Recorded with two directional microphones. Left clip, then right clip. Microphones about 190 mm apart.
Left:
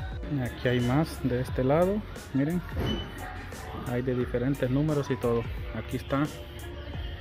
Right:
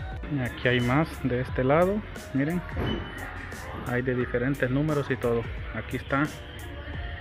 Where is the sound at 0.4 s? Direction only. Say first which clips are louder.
Right 3 dB; 20° left (ahead or behind).